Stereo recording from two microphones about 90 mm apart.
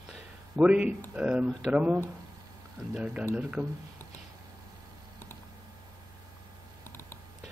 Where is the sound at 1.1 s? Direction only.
10° right (ahead or behind).